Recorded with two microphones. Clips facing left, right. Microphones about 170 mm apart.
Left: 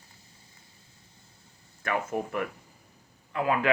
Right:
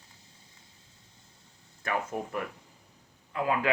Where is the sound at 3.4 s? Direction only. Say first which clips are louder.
Left 2 dB; 15° right (ahead or behind).